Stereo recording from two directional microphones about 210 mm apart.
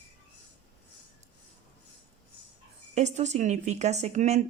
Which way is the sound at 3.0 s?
35° right (ahead or behind).